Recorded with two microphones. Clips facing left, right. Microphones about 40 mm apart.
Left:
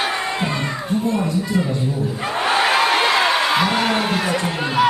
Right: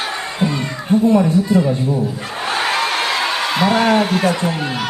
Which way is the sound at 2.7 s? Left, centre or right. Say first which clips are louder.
Left 2 dB; centre.